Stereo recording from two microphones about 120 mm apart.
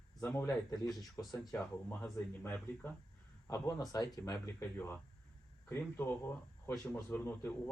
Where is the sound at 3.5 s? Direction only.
30° left (ahead or behind).